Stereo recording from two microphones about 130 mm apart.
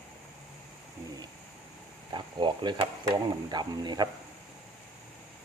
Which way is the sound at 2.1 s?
35° right (ahead or behind).